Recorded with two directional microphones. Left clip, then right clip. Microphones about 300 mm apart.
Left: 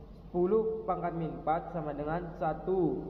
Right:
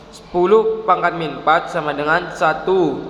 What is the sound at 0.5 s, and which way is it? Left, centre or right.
A man's voice, right.